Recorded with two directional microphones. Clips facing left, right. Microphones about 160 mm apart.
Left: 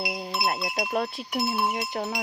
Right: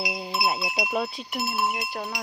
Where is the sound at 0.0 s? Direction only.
Centre (ahead or behind).